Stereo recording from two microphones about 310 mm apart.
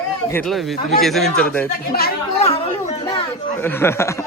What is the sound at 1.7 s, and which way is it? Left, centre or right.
Speech, left.